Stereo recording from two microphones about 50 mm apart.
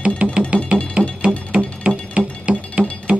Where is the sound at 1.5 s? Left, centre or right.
Right.